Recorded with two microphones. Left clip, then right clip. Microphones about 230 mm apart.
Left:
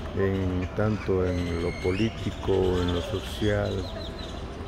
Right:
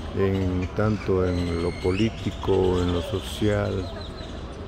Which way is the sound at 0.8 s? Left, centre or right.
Centre.